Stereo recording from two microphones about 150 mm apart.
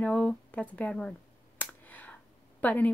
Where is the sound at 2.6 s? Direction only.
10° left (ahead or behind).